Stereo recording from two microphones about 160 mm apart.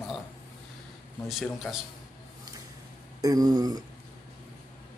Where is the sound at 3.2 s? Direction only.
25° right (ahead or behind).